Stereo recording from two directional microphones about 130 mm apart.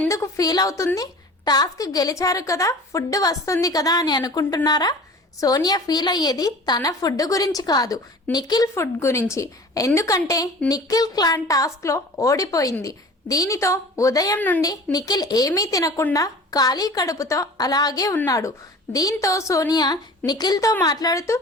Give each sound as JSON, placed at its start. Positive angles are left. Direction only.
{"t": 0.1, "sound": "a woman's voice", "side_deg": 25}
{"t": 14.3, "sound": "a woman's voice", "side_deg": 15}
{"t": 14.9, "sound": "a woman's voice", "side_deg": 30}